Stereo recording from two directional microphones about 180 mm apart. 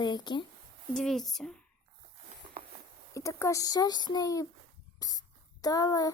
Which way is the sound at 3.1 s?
15° left (ahead or behind).